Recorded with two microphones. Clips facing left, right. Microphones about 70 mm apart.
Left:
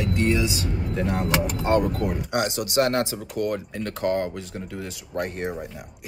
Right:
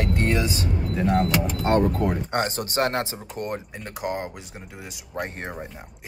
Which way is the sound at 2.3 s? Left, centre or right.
Right.